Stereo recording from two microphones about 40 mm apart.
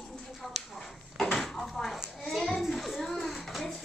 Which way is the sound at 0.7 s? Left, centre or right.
Centre.